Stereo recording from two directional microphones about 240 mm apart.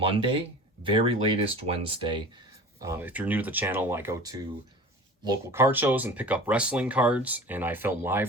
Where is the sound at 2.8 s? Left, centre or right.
Centre.